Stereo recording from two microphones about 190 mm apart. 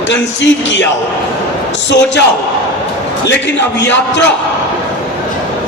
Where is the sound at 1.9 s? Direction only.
65° left (ahead or behind).